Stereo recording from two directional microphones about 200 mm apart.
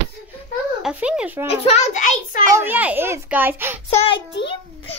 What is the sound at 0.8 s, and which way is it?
Speech, 5° right (ahead or behind).